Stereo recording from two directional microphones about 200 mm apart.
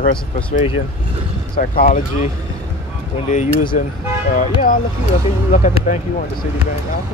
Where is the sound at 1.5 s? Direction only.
45° left (ahead or behind).